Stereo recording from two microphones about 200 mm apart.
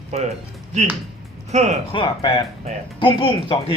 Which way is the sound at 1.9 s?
25° left (ahead or behind).